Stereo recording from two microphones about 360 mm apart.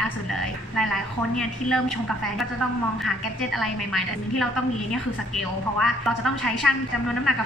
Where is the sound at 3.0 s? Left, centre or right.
Centre.